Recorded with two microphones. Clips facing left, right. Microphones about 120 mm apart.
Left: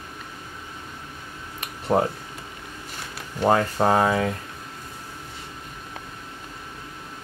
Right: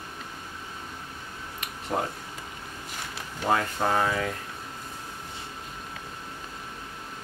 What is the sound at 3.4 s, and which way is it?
Speech, 45° left (ahead or behind).